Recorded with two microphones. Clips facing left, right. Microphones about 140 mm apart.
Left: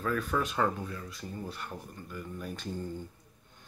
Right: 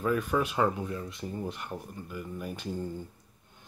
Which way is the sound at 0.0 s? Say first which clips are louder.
Right 3 dB; 15° right (ahead or behind).